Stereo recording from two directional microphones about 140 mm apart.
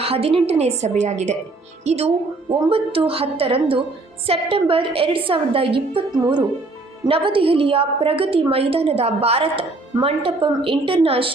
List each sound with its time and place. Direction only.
0.0 s a woman's voice: 45° right (ahead or behind)